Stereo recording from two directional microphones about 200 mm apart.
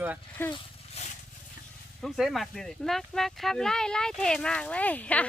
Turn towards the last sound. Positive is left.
turn(degrees=5)  # may be behind; listen again after turning